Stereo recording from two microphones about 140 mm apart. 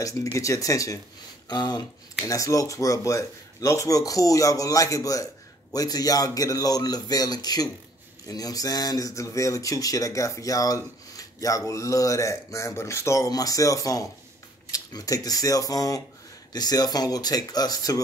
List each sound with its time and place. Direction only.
0.0 s speech: 25° left (ahead or behind)